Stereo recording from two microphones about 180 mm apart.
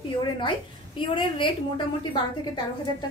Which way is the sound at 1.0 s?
30° left (ahead or behind).